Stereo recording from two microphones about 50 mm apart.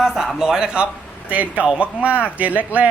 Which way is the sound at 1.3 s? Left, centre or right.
Right.